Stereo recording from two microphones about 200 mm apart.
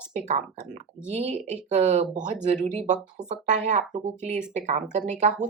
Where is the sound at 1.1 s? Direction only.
35° right (ahead or behind).